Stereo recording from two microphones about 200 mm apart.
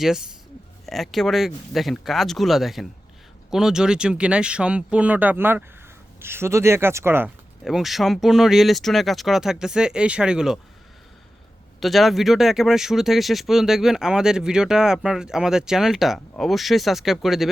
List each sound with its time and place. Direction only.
0.0 s a man's voice: 5° right (ahead or behind)
7.6 s speech: centre (ahead or behind)
11.8 s speech: centre (ahead or behind)